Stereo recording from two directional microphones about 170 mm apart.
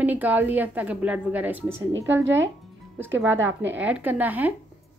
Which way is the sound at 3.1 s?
90° right.